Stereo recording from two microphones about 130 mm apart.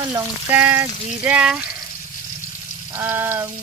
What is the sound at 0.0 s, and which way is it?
Speech, 15° right (ahead or behind).